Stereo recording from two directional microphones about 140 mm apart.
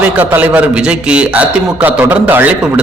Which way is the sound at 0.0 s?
10° right (ahead or behind).